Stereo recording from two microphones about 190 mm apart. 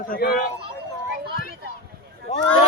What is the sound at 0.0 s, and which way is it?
Speech, 50° left (ahead or behind).